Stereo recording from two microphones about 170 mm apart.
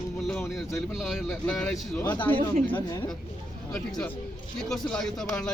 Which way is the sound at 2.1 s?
10° left (ahead or behind).